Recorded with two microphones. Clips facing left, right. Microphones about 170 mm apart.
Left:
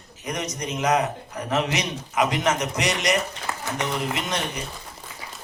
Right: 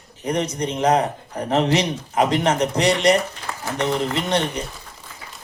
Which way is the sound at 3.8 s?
30° right (ahead or behind).